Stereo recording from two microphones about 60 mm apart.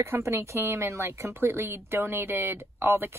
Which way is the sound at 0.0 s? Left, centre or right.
Right.